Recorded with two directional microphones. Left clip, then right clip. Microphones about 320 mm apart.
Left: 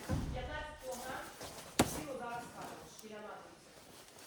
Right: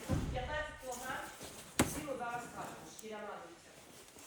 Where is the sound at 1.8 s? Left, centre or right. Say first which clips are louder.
Left 1 dB; left.